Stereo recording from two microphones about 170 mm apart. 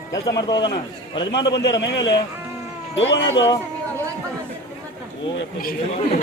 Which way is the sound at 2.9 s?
90° left.